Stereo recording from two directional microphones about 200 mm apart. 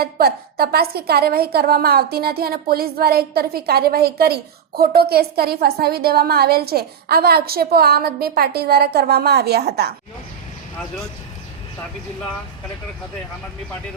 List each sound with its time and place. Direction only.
0.0 s a woman's voice: 50° right (ahead or behind)